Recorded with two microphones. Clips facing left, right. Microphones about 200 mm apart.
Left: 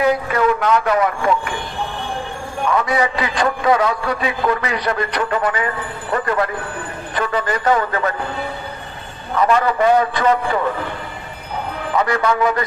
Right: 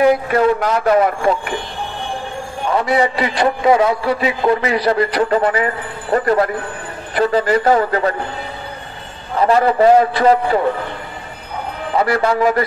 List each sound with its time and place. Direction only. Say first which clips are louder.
0.3 s a man's voice: right 2 dB; 35° right (ahead or behind)
2.7 s a man's voice: right 3 dB; 30° right (ahead or behind)
9.4 s a man's voice: right 3 dB; 30° right (ahead or behind)
11.9 s a man's voice: right 2 dB; 30° right (ahead or behind)